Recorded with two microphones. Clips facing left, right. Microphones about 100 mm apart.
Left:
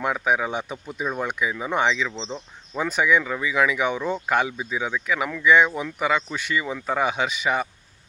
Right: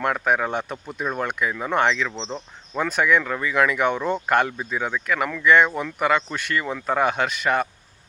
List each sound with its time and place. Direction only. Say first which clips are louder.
0.0 s speech: right 1 dB; 5° left (ahead or behind)